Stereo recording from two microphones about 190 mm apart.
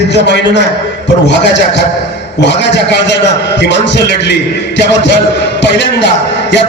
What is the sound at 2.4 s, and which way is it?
A man's voice, 65° left (ahead or behind).